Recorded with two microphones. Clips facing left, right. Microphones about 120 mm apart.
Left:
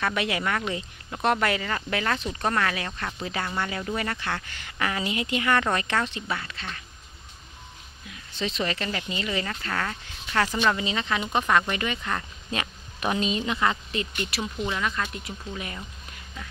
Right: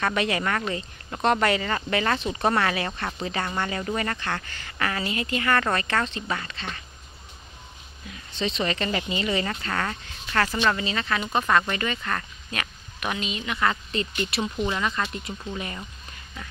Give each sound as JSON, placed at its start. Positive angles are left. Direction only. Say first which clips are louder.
{"t": 0.0, "sound": "speech", "louder": "right 2 dB", "side_deg": 5}
{"t": 8.1, "sound": "speech", "louder": "right 2 dB", "side_deg": 0}
{"t": 12.4, "sound": "speech", "louder": "left 2 dB", "side_deg": 30}
{"t": 13.6, "sound": "speech", "louder": "right 1 dB", "side_deg": 15}
{"t": 14.2, "sound": "speech", "louder": "right 3 dB", "side_deg": 0}